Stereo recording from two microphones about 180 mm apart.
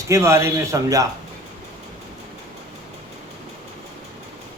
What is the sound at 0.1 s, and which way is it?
Speech, 15° right (ahead or behind).